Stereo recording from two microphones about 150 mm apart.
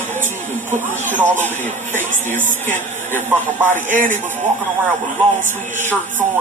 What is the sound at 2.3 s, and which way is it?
Speech, 60° right (ahead or behind).